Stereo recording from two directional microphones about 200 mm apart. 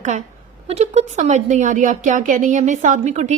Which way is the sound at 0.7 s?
35° right (ahead or behind).